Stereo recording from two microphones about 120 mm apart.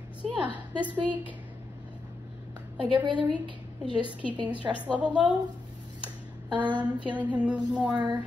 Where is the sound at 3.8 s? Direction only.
45° left (ahead or behind).